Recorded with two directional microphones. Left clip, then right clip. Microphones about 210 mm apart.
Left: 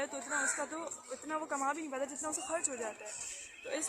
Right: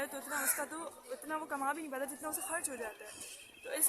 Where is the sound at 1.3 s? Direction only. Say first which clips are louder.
Left 1 dB; 5° left (ahead or behind).